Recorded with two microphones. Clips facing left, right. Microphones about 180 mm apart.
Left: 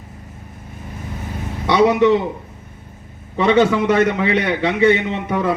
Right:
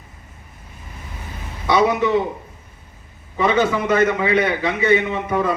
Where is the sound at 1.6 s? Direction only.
75° left (ahead or behind).